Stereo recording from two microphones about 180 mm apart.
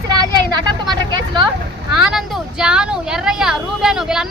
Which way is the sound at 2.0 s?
Centre (ahead or behind).